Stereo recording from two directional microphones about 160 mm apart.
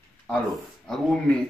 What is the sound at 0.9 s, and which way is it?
Speech, centre (ahead or behind).